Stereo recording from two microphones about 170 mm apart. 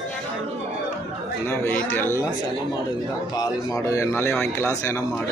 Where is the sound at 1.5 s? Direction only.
10° left (ahead or behind).